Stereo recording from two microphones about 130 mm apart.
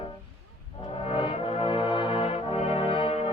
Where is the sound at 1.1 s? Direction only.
40° left (ahead or behind).